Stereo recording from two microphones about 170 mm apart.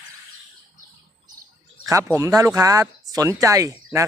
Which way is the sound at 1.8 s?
20° right (ahead or behind).